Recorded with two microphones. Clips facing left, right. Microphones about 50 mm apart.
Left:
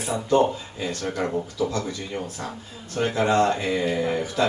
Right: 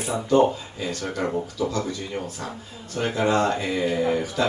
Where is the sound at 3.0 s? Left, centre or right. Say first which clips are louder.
Left 1 dB; centre.